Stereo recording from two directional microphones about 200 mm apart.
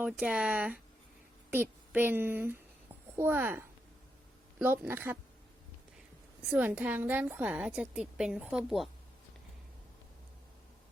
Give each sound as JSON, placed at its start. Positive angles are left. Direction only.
{"t": 0.0, "sound": "a woman's voice", "side_deg": -5}
{"t": 6.5, "sound": "a woman's voice", "side_deg": -10}